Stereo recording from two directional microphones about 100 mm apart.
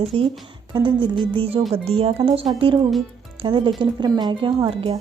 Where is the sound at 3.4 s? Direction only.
55° right (ahead or behind).